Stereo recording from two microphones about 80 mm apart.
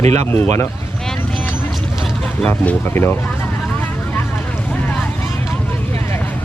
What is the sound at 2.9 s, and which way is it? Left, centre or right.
Speech, left.